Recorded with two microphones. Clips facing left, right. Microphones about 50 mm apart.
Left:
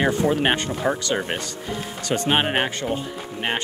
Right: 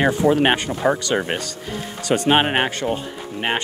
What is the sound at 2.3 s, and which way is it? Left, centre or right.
Speech, centre.